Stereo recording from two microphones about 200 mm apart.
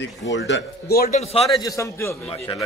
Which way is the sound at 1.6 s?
15° left (ahead or behind).